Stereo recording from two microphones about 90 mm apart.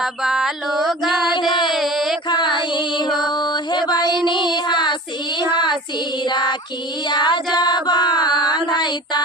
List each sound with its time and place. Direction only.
0.0 s music: 5° right (ahead or behind)
1.3 s music: 60° left (ahead or behind)
1.7 s a sound: centre (ahead or behind)
2.7 s music: 55° left (ahead or behind)
3.2 s mantra: 50° left (ahead or behind)
4.3 s child singing: 55° left (ahead or behind)
6.2 s child singing: 55° left (ahead or behind)
7.1 s music: 55° left (ahead or behind)